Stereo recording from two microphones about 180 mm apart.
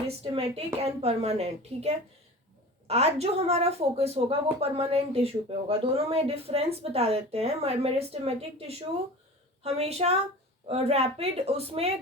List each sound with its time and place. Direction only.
0.2 s speech: 35° right (ahead or behind)